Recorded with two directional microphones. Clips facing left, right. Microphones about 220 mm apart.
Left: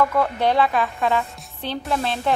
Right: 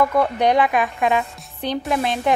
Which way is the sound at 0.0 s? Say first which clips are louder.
Right 2 dB; 15° right (ahead or behind).